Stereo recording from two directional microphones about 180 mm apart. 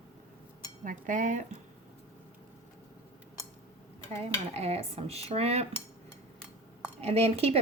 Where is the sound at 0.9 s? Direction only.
45° right (ahead or behind).